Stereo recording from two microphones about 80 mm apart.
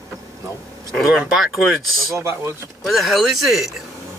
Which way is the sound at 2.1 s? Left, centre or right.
Right.